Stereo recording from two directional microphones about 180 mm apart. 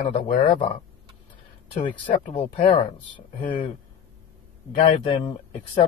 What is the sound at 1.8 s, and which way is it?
A man's voice, 30° left (ahead or behind).